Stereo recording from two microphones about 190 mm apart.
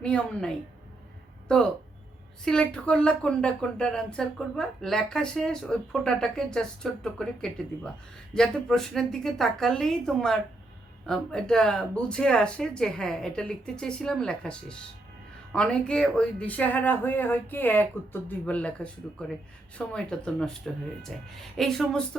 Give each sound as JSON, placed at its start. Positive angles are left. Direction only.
{"t": 0.0, "sound": "speech", "side_deg": 5}